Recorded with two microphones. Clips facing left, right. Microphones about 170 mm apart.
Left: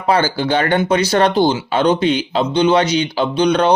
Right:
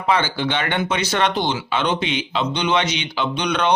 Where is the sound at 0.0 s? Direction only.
35° left (ahead or behind).